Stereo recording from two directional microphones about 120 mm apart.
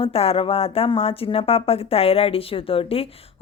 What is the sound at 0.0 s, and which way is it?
Speech, 55° left (ahead or behind).